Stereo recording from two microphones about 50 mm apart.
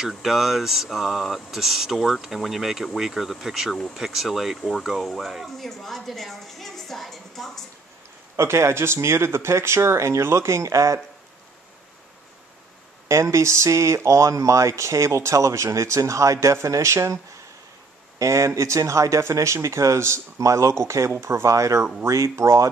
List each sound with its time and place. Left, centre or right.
0.1 s speech: centre
4.6 s speech: centre
4.8 s speech: centre
8.4 s speech: right
13.1 s speech: right
18.2 s speech: right